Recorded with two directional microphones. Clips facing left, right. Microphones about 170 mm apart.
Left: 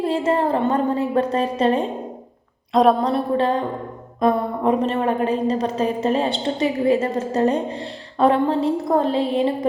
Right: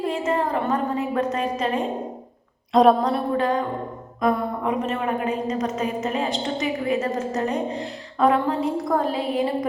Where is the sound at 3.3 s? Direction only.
30° left (ahead or behind).